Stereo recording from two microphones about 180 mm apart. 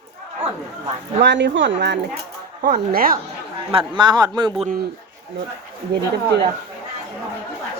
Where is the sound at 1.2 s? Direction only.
80° right.